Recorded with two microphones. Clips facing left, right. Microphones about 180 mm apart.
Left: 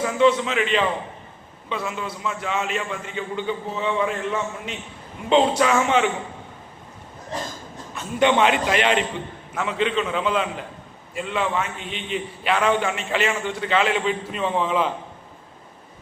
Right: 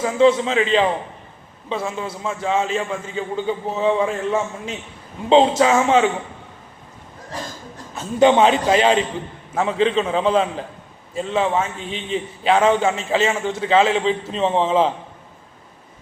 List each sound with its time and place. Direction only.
0.0 s a man's voice: 30° right (ahead or behind)
5.3 s a man's voice: 30° right (ahead or behind)
7.9 s a man's voice: 35° right (ahead or behind)